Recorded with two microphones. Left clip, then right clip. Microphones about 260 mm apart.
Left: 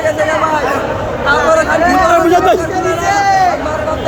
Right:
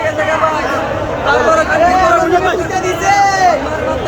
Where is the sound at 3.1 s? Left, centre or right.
Right.